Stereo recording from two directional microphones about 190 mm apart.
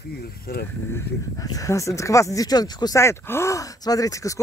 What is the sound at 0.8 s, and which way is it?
Speech, 15° left (ahead or behind).